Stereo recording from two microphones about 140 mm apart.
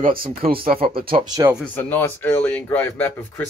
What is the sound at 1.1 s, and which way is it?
Speech, 30° right (ahead or behind).